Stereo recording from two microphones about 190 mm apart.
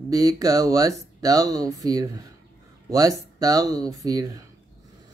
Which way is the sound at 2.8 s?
20° right (ahead or behind).